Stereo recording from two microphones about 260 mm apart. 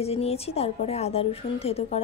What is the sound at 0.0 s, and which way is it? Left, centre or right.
Speech, left.